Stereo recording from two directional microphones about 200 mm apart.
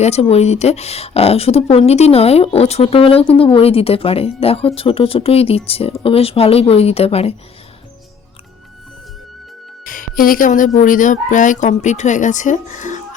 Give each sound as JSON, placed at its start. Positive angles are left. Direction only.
{"t": 0.0, "sound": "speech", "side_deg": 30}
{"t": 9.8, "sound": "speech", "side_deg": 45}